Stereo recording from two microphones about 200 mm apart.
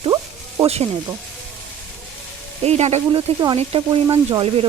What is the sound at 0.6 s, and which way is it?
Speech, 30° right (ahead or behind).